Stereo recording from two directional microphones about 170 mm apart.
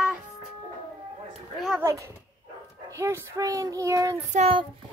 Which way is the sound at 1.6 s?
5° right (ahead or behind).